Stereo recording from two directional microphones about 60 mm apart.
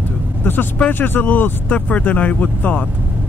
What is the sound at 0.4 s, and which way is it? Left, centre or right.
Speech, left.